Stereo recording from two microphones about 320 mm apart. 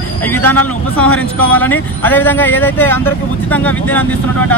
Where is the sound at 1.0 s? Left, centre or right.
Left.